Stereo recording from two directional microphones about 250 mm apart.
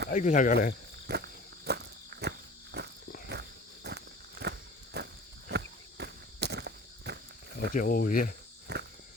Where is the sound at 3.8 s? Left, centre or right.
Right.